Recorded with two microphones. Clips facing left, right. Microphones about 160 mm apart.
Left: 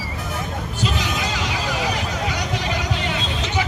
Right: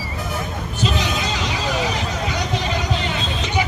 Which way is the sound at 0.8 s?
20° right (ahead or behind).